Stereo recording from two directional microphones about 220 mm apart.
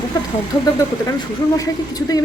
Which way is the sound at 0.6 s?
15° left (ahead or behind).